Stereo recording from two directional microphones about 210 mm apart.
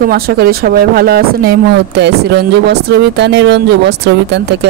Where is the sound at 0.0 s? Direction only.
45° right (ahead or behind).